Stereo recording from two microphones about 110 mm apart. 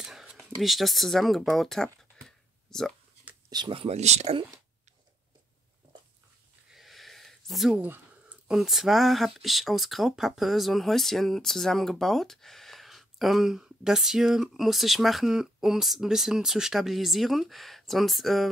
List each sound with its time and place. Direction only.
0.0 s a sound: 5° right (ahead or behind)
3.4 s speech: 40° right (ahead or behind)
3.7 s speech: 75° right (ahead or behind)
6.7 s a sound: centre (ahead or behind)
7.7 s speech: 15° right (ahead or behind)
8.5 s speech: centre (ahead or behind)